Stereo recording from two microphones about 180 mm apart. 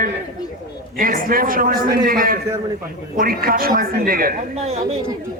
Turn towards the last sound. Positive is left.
turn(degrees=-35)  # may be behind; listen again after turning